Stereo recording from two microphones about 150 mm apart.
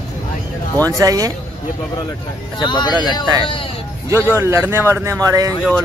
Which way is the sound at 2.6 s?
30° left (ahead or behind).